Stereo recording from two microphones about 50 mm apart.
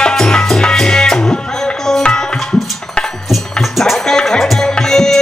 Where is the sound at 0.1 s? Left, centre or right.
Centre.